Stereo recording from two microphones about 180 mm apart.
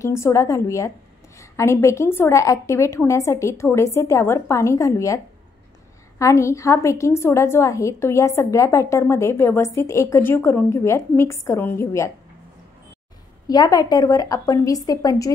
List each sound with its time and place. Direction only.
0.0 s a woman's voice: 15° left (ahead or behind)
13.5 s a woman's voice: 20° left (ahead or behind)